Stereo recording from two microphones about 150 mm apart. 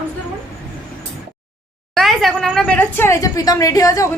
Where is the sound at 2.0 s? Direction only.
Centre (ahead or behind); by 4.1 s 25° left (ahead or behind).